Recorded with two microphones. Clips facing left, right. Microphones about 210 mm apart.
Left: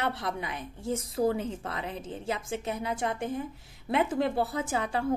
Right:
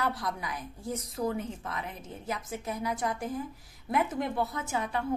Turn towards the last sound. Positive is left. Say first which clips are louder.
# left 3 dB
turn(degrees=30)  # may be behind; listen again after turning